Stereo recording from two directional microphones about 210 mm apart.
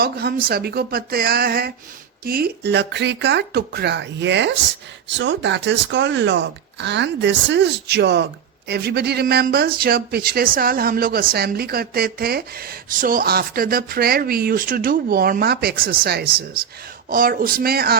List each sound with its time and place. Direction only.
0.0 s speech: 45° right (ahead or behind)